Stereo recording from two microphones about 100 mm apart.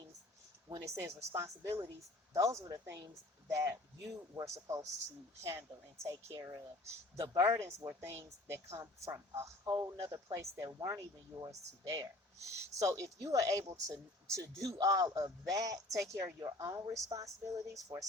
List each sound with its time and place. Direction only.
0.7 s a woman's voice: 30° right (ahead or behind)
12.5 s speech: 30° right (ahead or behind)